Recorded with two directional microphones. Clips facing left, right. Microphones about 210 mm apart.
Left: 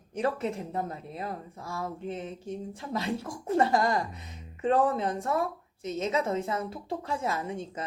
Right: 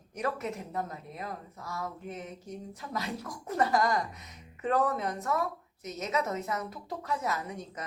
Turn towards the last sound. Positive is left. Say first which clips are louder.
# left 4 dB
turn(degrees=30)  # may be behind; listen again after turning